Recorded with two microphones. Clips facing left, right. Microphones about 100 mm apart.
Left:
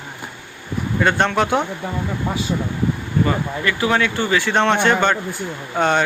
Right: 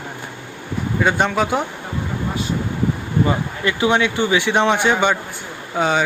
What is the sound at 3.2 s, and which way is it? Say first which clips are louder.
Speech: right 1 dB; 20° right (ahead or behind).